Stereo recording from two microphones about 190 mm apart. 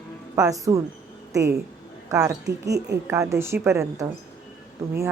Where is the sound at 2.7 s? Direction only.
60° right (ahead or behind).